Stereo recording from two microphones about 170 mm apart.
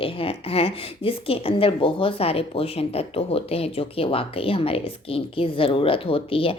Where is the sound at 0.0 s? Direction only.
35° left (ahead or behind).